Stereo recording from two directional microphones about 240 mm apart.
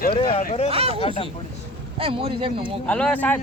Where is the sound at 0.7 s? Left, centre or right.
Right.